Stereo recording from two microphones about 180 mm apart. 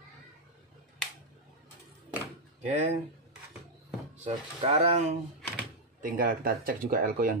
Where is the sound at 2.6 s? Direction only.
35° right (ahead or behind).